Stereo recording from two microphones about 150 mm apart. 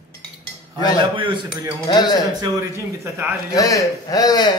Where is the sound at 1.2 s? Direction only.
30° right (ahead or behind).